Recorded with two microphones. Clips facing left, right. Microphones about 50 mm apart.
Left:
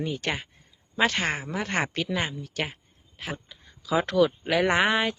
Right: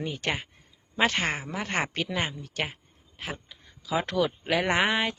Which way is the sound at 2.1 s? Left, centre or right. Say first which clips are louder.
Left 1 dB; centre.